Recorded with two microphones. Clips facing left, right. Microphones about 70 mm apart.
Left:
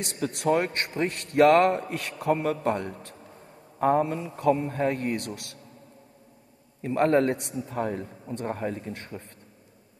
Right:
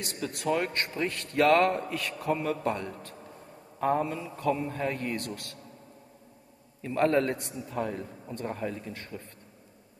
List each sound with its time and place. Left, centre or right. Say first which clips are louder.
0.4 s a man's voice: left 4 dB; left
5.2 s speech: left 1 dB; right
6.8 s a man's voice: left 3 dB; left